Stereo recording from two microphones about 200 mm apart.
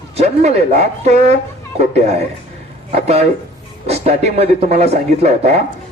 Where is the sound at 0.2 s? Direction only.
35° right (ahead or behind).